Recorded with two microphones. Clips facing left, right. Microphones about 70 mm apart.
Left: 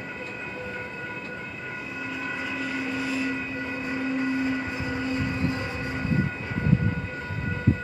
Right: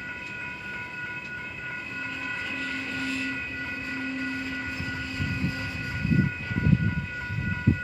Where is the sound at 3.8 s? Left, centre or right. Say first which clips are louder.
Left 6 dB; centre.